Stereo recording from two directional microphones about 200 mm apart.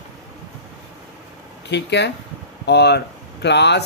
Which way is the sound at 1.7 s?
60° left (ahead or behind).